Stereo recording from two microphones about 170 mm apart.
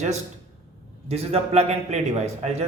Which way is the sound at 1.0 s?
35° right (ahead or behind).